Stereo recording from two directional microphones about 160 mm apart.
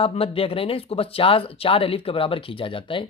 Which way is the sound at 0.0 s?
35° left (ahead or behind).